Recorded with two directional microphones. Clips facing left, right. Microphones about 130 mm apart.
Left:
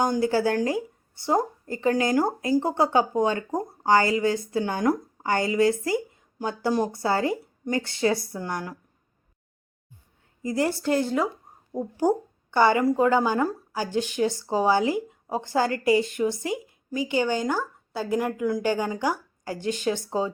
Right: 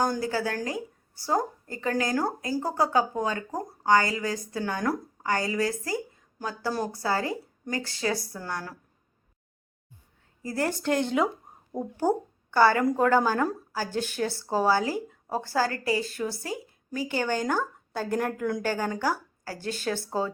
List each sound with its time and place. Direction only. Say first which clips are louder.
0.0 s speech: left 4 dB; 25° left (ahead or behind)
10.4 s speech: left 3 dB; 15° left (ahead or behind)
11.9 s speech: left 3 dB; 15° left (ahead or behind)
18.6 s speech: left 3 dB; 15° left (ahead or behind)